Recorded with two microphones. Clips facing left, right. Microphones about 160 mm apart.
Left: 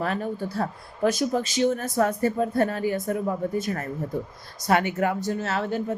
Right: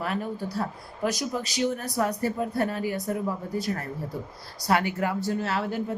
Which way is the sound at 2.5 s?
50° left (ahead or behind).